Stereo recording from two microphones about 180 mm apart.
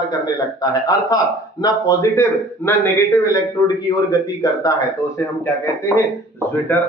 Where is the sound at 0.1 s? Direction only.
20° left (ahead or behind).